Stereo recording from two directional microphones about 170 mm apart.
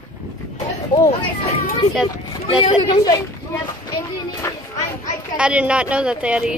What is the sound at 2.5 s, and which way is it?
A child's voice, 25° left (ahead or behind).